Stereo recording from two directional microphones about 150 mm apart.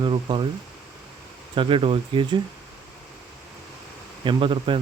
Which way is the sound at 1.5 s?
35° right (ahead or behind).